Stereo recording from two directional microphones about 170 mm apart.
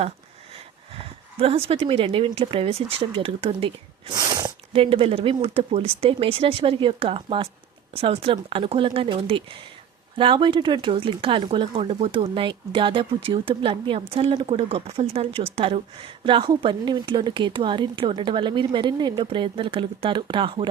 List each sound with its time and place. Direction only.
1.4 s speech: 35° right (ahead or behind)